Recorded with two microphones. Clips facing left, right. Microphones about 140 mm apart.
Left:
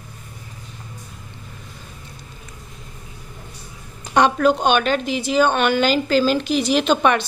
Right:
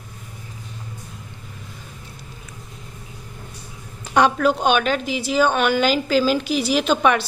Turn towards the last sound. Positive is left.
turn(degrees=-5)  # may be behind; listen again after turning